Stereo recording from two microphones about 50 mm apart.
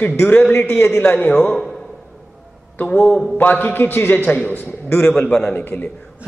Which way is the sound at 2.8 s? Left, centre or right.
Left.